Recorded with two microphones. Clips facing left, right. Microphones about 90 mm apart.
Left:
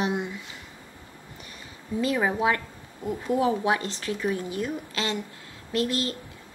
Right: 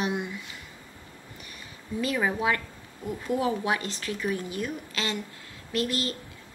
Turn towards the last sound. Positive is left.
turn(degrees=20)  # may be behind; listen again after turning